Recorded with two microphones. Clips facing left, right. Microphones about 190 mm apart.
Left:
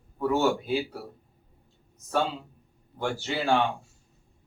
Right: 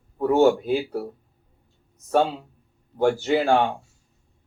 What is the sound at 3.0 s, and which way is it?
Speech, 50° right (ahead or behind).